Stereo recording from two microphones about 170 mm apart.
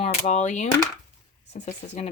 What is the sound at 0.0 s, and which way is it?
Speech, 45° left (ahead or behind).